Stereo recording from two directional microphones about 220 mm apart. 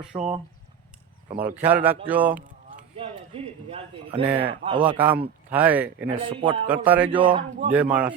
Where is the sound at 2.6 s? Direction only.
25° right (ahead or behind).